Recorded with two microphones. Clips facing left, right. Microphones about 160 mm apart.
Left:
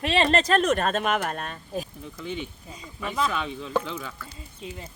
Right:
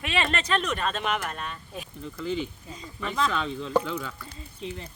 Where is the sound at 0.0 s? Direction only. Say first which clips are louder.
Left 6 dB; 35° left (ahead or behind).